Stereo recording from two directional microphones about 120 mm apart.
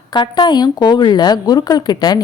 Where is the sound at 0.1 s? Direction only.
40° left (ahead or behind).